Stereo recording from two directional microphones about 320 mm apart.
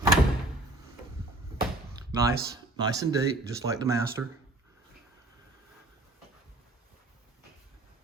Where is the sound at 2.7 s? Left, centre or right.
Centre.